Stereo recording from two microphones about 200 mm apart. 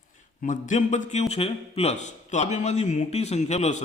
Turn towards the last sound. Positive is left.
turn(degrees=35)  # may be behind; listen again after turning